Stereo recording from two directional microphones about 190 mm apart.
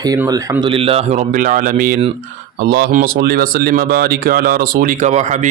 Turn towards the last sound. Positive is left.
turn(degrees=-40)  # may be behind; listen again after turning